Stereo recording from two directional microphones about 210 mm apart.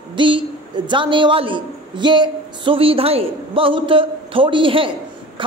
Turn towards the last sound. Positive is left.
turn(degrees=-25)  # may be behind; listen again after turning